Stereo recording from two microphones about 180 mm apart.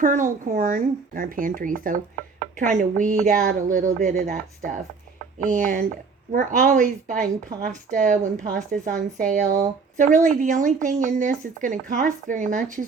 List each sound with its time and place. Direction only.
0.0 s a woman's voice: 45° right (ahead or behind)